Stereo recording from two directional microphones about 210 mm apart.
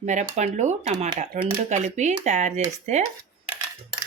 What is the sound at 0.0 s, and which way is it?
Speech, 35° right (ahead or behind).